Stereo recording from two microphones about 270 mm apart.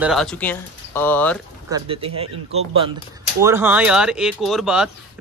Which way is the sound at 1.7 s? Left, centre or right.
Centre.